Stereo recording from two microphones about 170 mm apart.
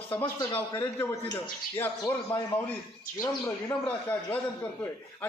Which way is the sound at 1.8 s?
10° left (ahead or behind).